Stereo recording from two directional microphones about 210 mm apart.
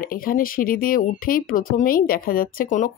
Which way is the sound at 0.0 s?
45° left (ahead or behind).